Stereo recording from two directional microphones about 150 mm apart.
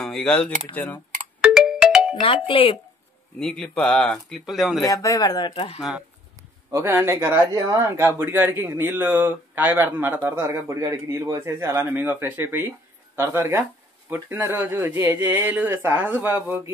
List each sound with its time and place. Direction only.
0.0 s speech: 5° left (ahead or behind)
1.4 s ringtone: 5° right (ahead or behind)
2.2 s speech: 35° left (ahead or behind)
3.3 s speech: 5° left (ahead or behind)
4.8 s speech: 20° left (ahead or behind)
5.8 s speech: centre (ahead or behind)
6.7 s speech: 15° right (ahead or behind)